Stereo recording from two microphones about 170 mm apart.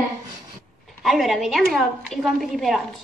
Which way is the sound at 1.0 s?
Centre (ahead or behind).